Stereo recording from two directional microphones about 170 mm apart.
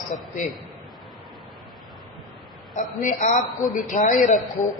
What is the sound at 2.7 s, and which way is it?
A man's voice, 50° left (ahead or behind).